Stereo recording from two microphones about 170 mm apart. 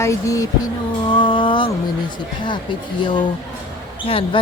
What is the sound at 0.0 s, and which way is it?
Speech, 20° left (ahead or behind).